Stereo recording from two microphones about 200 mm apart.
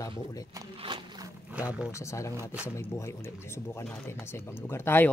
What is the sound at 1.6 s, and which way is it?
Speech, 5° right (ahead or behind).